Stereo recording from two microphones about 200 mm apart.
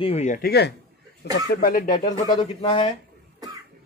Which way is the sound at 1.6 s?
45° left (ahead or behind).